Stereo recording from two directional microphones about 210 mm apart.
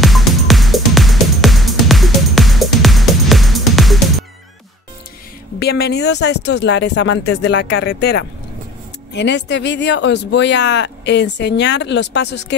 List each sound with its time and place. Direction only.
0.0 s music: centre (ahead or behind)
5.6 s speech: 50° left (ahead or behind)